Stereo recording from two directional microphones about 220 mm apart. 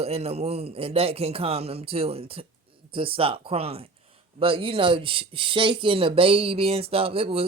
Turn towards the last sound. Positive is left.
turn(degrees=-25)  # may be behind; listen again after turning